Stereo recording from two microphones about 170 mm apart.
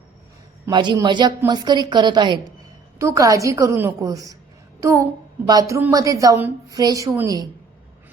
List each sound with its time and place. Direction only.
0.7 s a woman's voice: 25° right (ahead or behind)